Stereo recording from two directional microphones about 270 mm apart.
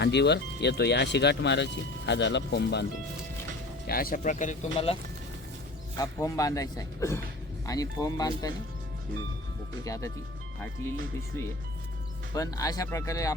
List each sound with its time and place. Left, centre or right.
0.0 s speech: left
3.8 s speech: left
6.0 s speech: centre
9.8 s speech: centre
12.3 s speech: centre